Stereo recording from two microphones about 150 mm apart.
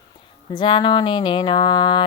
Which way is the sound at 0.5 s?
30° left (ahead or behind).